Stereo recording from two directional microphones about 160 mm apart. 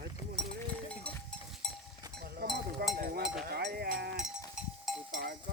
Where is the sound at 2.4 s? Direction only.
90° right.